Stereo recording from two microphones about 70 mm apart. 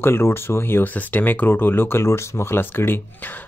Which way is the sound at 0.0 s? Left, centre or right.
Left.